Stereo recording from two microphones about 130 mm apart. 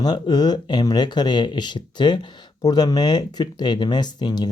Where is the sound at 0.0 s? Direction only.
35° left (ahead or behind).